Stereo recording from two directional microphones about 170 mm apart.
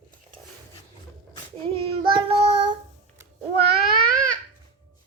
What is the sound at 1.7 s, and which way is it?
Child singing, 35° right (ahead or behind).